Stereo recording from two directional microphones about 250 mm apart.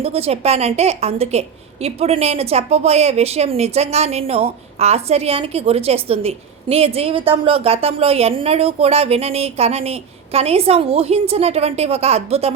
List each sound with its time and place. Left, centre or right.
0.0 s a woman's voice: right